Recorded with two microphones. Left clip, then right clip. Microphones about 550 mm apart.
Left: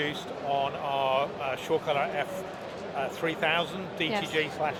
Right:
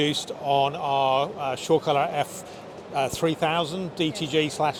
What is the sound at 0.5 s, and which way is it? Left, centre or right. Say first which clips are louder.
Speech: right 6 dB; right.